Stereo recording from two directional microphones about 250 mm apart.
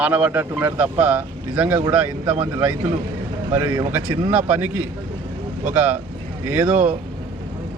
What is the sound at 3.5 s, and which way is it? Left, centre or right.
Speech, centre.